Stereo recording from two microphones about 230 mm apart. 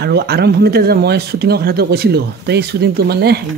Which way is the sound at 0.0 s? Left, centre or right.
Right.